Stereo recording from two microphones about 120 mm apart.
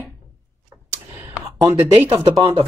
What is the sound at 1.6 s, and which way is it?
Speech, 25° right (ahead or behind).